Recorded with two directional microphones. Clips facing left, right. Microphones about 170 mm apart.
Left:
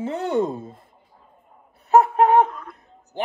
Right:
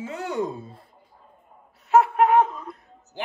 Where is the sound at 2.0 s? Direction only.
35° left (ahead or behind).